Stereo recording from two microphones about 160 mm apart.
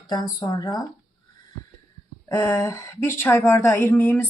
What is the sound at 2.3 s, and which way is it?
Speech, 20° left (ahead or behind).